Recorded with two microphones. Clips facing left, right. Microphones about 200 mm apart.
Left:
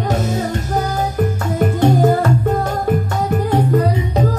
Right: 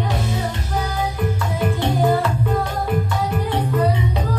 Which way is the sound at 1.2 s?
45° left (ahead or behind).